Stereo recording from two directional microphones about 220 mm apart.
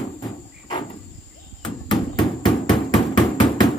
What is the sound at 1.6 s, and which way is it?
Hammer, 20° left (ahead or behind).